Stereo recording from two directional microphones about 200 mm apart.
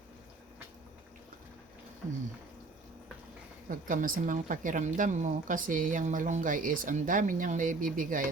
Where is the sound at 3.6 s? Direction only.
40° right (ahead or behind).